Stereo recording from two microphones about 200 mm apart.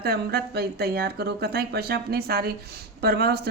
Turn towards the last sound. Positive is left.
turn(degrees=-55)  # may be behind; listen again after turning